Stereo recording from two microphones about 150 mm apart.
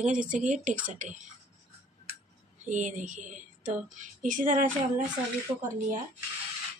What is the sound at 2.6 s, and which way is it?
A woman's voice, 55° right (ahead or behind).